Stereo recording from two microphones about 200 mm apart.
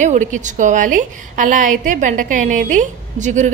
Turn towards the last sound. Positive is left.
turn(degrees=-35)  # may be behind; listen again after turning